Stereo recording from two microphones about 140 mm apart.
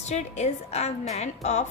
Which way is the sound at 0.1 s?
55° left (ahead or behind).